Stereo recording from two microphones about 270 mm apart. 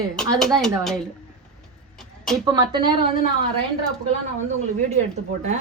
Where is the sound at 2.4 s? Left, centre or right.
Centre.